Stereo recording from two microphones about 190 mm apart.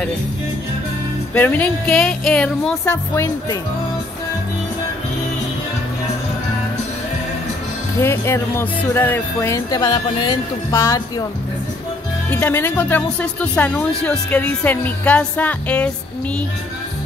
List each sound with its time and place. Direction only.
1.3 s speech: 10° left (ahead or behind)
2.9 s speech: 15° left (ahead or behind)
8.0 s speech: 10° left (ahead or behind)
12.3 s speech: 10° left (ahead or behind)